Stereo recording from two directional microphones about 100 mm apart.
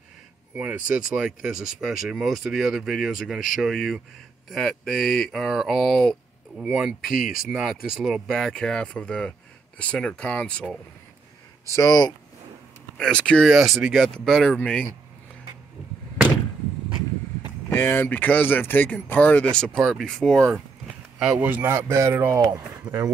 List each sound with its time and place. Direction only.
0.6 s speech: 15° right (ahead or behind)
1.8 s speech: 5° right (ahead or behind)
11.7 s speech: 35° left (ahead or behind)
12.9 s speech: 10° left (ahead or behind)
17.6 s speech: 20° left (ahead or behind)
21.2 s speech: 10° right (ahead or behind)
21.5 s speech: 20° right (ahead or behind)